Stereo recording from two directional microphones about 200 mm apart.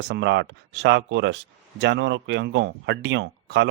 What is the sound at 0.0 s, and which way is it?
A man's voice, 60° right (ahead or behind).